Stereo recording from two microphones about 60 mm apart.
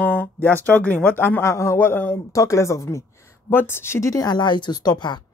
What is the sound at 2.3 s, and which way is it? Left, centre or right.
Speech, left.